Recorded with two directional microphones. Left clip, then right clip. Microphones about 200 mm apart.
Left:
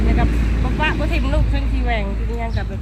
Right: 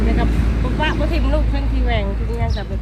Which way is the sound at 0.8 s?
5° left (ahead or behind).